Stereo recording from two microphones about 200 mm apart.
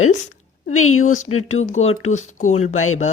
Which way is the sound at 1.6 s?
35° left (ahead or behind).